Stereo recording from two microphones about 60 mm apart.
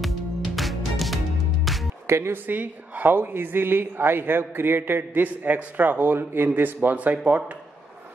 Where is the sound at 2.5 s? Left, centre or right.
Right.